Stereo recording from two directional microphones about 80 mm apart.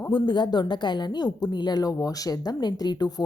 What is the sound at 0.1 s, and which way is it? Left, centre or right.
A woman's voice, left.